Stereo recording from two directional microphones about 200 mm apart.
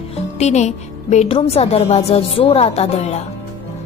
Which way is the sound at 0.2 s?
35° left (ahead or behind).